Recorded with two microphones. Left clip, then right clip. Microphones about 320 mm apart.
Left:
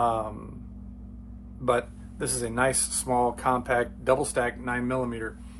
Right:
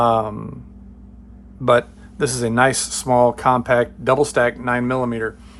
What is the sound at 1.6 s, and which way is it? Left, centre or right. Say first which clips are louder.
Speech: right 10 dB; right.